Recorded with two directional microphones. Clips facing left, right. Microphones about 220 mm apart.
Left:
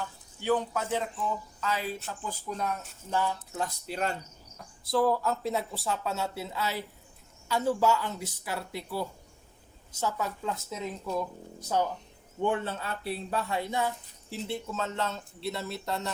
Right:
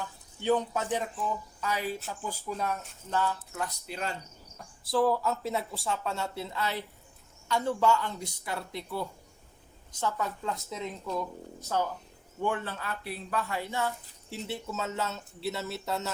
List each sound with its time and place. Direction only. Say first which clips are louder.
0.4 s a man's voice: right 1 dB; 20° right (ahead or behind); by 2.7 s 5° right (ahead or behind)
3.1 s speech: even; 10° left (ahead or behind)
3.5 s speech: left 2 dB; 35° left (ahead or behind)
4.9 s speech: even; centre (ahead or behind)
11.7 s speech: left 2 dB; 15° left (ahead or behind)
14.3 s speech: left 2 dB; centre (ahead or behind)